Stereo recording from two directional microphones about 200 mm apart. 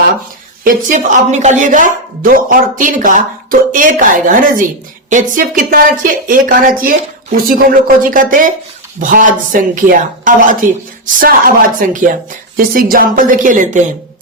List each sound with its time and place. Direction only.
0.6 s speech: 40° right (ahead or behind)